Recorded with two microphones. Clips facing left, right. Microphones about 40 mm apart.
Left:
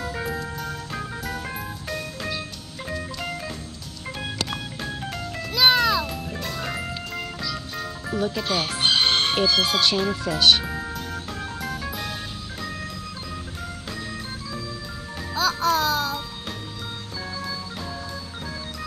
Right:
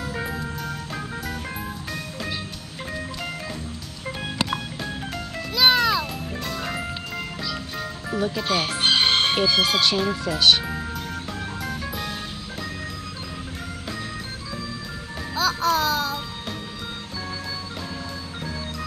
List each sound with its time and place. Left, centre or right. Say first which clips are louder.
0.3 s music: even; centre
4.5 s music: right 2 dB; centre
8.9 s music: right 2 dB; centre
9.6 s speech: right 1 dB; centre
11.6 s music: even; centre
15.3 s music: even; centre